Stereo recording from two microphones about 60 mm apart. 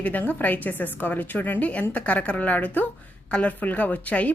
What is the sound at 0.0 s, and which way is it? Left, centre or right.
A woman's voice, left.